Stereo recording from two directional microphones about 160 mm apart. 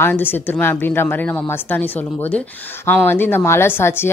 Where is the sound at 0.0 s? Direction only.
10° left (ahead or behind).